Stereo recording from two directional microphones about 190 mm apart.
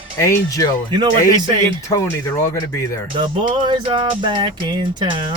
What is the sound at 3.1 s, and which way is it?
Music, 25° right (ahead or behind).